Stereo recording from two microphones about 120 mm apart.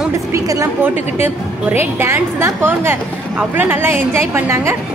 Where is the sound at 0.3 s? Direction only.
25° right (ahead or behind).